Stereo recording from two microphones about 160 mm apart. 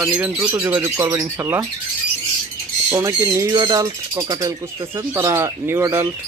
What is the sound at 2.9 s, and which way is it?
Speech, 20° right (ahead or behind).